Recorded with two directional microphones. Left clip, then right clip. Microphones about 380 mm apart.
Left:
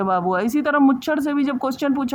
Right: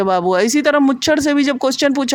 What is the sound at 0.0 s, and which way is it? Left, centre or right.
Speech, left.